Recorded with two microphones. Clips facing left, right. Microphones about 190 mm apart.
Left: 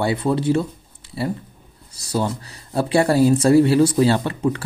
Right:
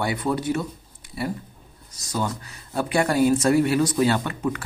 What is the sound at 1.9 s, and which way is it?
Speech, 30° left (ahead or behind).